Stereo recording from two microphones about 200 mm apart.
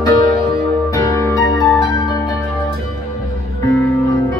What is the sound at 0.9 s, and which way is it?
Music, 15° left (ahead or behind).